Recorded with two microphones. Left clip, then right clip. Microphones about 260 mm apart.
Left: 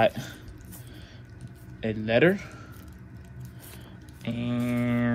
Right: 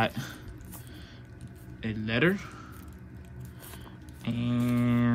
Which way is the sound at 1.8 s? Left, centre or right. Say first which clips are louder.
Left 6 dB; centre.